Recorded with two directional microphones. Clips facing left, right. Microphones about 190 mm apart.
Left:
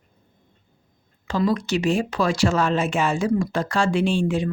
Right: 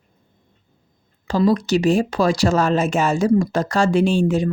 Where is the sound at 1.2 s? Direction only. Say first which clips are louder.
Right 5 dB; 35° right (ahead or behind).